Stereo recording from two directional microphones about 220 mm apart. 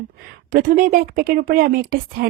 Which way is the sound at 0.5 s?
40° right (ahead or behind).